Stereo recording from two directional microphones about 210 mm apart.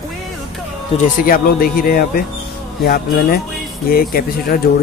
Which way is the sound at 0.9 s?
45° left (ahead or behind).